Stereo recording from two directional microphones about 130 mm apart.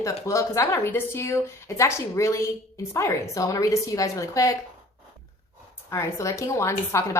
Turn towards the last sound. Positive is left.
turn(degrees=20)  # may be behind; listen again after turning